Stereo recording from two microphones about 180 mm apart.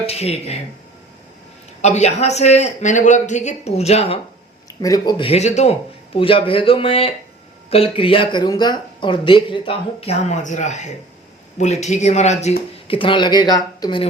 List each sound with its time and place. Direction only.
0.0 s speech: 35° left (ahead or behind)
1.8 s speech: 40° left (ahead or behind)
4.8 s speech: 20° left (ahead or behind); by 12.5 s 40° left (ahead or behind)
12.9 s speech: 30° left (ahead or behind)